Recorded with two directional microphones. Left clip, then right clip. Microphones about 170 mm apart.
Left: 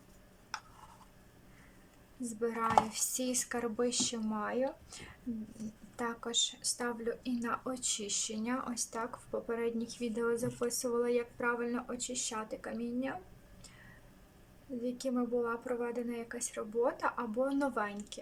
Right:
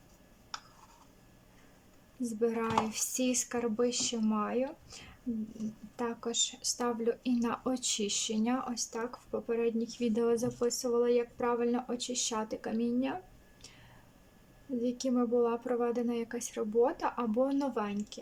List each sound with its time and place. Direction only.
2.2 s speech: 15° right (ahead or behind)
14.8 s speech: 20° right (ahead or behind)